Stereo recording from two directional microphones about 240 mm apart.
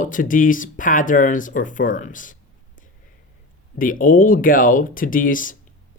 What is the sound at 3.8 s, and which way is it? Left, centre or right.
Speech, left.